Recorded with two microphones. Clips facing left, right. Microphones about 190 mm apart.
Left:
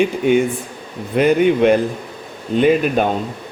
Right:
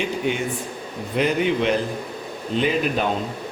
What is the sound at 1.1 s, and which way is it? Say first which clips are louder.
Speech: left 7 dB; 50° left (ahead or behind).